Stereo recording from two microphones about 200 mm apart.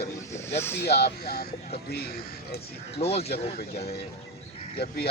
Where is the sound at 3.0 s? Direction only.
30° left (ahead or behind).